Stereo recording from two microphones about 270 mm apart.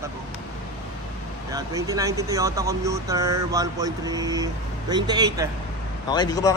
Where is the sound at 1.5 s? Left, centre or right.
Centre.